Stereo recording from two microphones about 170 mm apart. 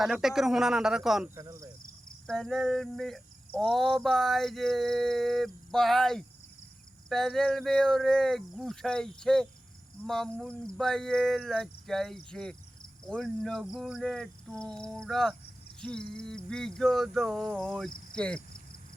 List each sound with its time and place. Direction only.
0.0 s cricket: centre (ahead or behind)
1.4 s speech: 20° right (ahead or behind)
2.2 s cricket: 5° left (ahead or behind)